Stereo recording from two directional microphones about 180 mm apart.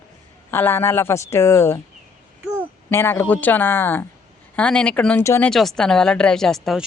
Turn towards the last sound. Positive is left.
turn(degrees=0)  # may be behind; listen again after turning